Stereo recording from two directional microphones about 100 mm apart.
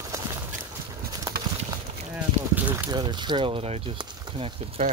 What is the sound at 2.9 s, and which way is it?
Speech, 50° right (ahead or behind).